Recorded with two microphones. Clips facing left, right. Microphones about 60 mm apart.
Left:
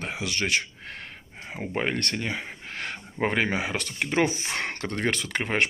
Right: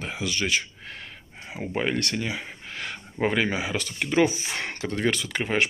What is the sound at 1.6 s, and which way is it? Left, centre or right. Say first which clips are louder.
Speech: right 1 dB; left.